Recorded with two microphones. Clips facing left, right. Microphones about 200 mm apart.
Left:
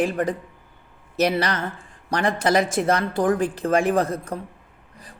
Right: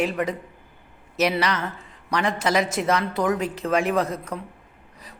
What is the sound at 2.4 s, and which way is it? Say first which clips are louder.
Speech: left 4 dB; 30° left (ahead or behind).